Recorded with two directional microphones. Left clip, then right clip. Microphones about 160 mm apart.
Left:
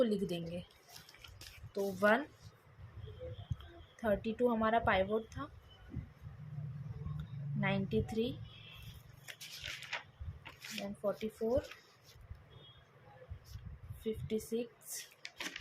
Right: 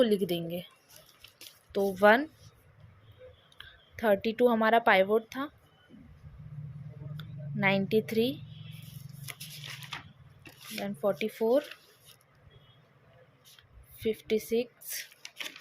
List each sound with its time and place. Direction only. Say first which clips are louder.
0.0 s speech: right 7 dB; 45° right (ahead or behind)
1.7 s speech: right 9 dB; 50° right (ahead or behind)
3.9 s speech: right 9 dB; 50° right (ahead or behind)
7.2 s a woman's voice: right 9 dB; 50° right (ahead or behind)
11.0 s speech: right 9 dB; 50° right (ahead or behind)
14.0 s speech: right 9 dB; 50° right (ahead or behind)